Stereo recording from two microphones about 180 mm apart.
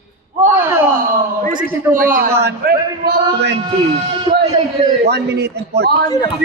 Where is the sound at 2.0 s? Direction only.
55° right (ahead or behind).